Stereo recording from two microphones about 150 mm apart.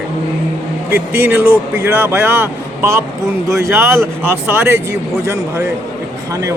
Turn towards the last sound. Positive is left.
turn(degrees=-20)  # may be behind; listen again after turning